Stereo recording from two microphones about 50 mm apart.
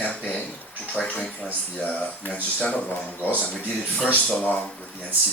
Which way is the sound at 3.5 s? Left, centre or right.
Centre.